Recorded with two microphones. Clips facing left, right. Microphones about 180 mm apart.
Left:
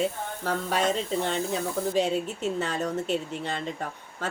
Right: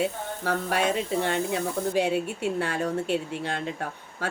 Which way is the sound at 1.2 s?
60° right (ahead or behind).